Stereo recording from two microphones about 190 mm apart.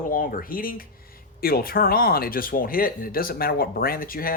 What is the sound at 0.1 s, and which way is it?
Speech, 50° left (ahead or behind).